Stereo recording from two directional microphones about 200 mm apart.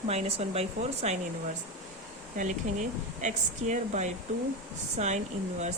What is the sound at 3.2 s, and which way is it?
Speech, 35° right (ahead or behind).